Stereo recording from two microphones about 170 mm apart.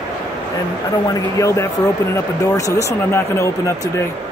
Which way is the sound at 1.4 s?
15° left (ahead or behind).